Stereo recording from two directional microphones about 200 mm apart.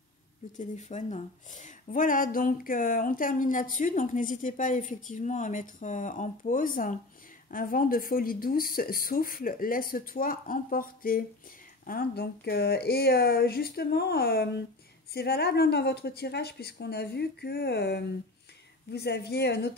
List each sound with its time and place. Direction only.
0.6 s speech: 35° left (ahead or behind); by 19.7 s 55° left (ahead or behind)